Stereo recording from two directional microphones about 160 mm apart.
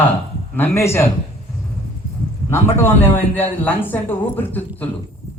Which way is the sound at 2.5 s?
15° left (ahead or behind).